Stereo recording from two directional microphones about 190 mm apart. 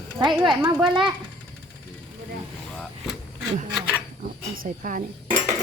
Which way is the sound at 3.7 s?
10° right (ahead or behind).